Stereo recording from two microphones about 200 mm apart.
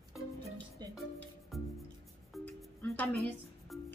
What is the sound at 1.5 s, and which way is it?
Music, centre (ahead or behind).